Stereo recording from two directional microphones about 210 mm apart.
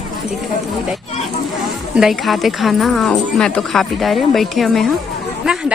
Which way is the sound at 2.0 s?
Centre (ahead or behind).